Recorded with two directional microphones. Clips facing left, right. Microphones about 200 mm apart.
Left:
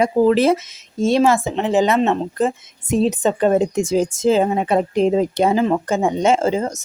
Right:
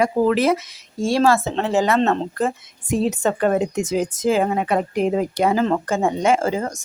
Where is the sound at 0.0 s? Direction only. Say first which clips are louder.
Left 3 dB; 25° left (ahead or behind).